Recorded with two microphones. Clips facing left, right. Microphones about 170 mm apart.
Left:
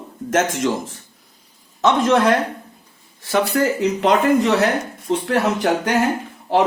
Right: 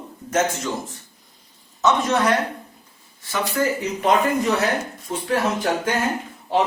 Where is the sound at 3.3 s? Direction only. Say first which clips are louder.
Left 4 dB; 70° left (ahead or behind).